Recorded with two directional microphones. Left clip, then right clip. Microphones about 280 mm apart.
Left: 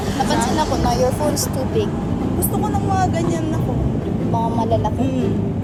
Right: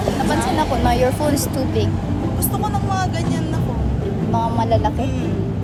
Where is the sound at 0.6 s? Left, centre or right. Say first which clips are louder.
Right 1 dB; right.